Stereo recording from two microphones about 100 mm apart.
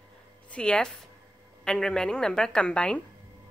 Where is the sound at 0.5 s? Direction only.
10° left (ahead or behind).